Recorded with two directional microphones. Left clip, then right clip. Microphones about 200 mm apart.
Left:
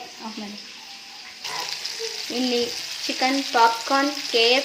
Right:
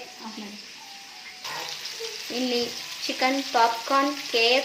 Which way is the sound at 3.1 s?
Centre (ahead or behind).